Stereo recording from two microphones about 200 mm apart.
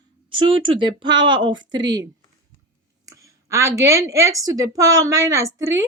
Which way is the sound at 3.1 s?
15° right (ahead or behind).